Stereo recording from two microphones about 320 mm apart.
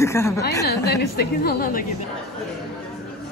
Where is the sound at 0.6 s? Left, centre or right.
Left.